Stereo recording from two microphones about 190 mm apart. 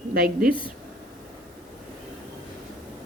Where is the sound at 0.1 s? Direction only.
50° right (ahead or behind).